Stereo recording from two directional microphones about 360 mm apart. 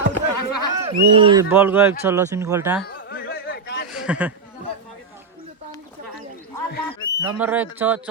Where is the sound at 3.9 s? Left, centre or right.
Centre.